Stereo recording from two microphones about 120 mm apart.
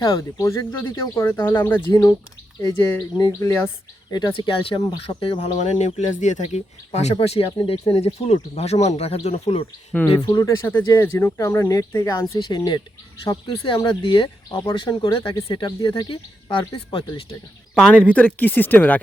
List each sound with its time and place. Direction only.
0.0 s speech: 30° left (ahead or behind)
1.9 s speech: 30° left (ahead or behind)
4.1 s speech: 40° left (ahead or behind)
5.5 s speech: 85° left; by 9.6 s 55° left (ahead or behind)
9.9 s speech: 15° left (ahead or behind)
10.2 s speech: 30° left (ahead or behind)
10.6 s speech: 20° left (ahead or behind); by 17.1 s 45° left (ahead or behind)
17.7 s speech: 10° left (ahead or behind)